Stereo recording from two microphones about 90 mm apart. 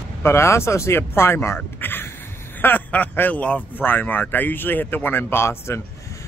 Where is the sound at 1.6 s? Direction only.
20° left (ahead or behind).